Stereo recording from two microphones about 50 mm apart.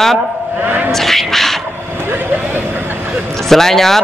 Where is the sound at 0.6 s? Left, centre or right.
Right.